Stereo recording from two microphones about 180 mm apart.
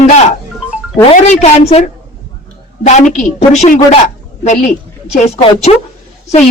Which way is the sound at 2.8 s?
40° left (ahead or behind).